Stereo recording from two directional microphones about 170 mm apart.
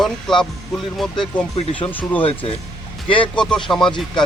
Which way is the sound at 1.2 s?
30° left (ahead or behind).